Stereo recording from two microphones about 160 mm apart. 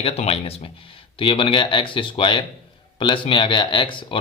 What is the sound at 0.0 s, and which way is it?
Speech, 40° left (ahead or behind).